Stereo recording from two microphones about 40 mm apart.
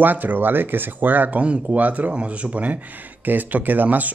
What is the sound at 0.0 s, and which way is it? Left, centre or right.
Speech, right.